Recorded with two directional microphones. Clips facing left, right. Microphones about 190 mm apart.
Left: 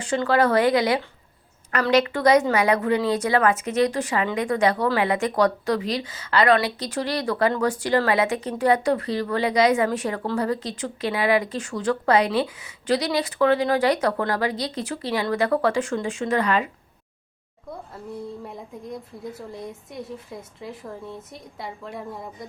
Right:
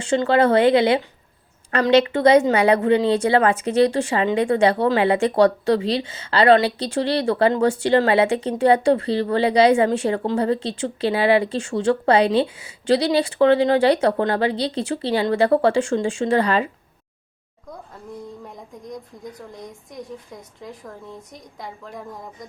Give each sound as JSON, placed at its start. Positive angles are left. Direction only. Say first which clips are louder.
{"t": 0.0, "sound": "speech", "louder": "right 3 dB", "side_deg": -25}
{"t": 18.4, "sound": "a woman's voice", "louder": "left 1 dB", "side_deg": 5}